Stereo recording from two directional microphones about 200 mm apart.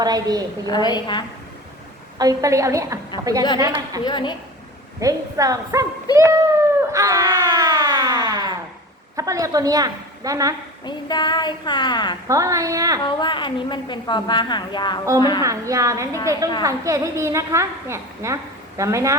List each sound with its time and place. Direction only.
0.0 s a woman's voice: 20° right (ahead or behind)
0.7 s a woman's voice: 20° left (ahead or behind)
2.1 s a woman's voice: 15° right (ahead or behind)
4.0 s a woman's voice: 20° left (ahead or behind)
4.9 s a woman's voice: 15° right (ahead or behind)
6.1 s a sound: 15° right (ahead or behind)
9.1 s a woman's voice: 15° right (ahead or behind)
10.8 s a woman's voice: 20° left (ahead or behind)
12.3 s a woman's voice: 15° right (ahead or behind)
13.0 s a woman's voice: 25° left (ahead or behind)
15.4 s a woman's voice: 15° right (ahead or behind)